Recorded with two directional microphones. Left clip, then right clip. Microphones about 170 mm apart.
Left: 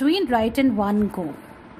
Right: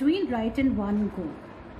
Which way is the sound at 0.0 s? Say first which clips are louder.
Left 6 dB; 70° left (ahead or behind).